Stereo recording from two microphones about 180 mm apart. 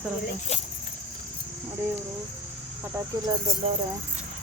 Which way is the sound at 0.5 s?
35° left (ahead or behind).